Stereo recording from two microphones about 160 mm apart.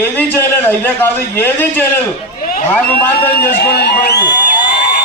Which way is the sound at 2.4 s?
60° left (ahead or behind).